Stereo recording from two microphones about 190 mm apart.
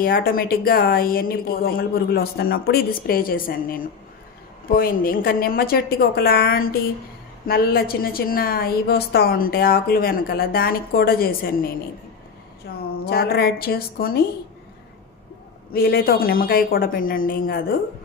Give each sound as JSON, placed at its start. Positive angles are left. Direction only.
{"t": 0.0, "sound": "a woman's voice", "side_deg": 50}
{"t": 13.0, "sound": "a woman's voice", "side_deg": 55}
{"t": 15.7, "sound": "a woman's voice", "side_deg": 55}